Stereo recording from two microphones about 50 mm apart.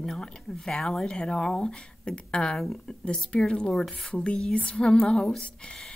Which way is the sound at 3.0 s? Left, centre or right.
Left.